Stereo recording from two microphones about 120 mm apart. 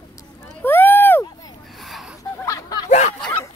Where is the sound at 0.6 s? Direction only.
15° left (ahead or behind).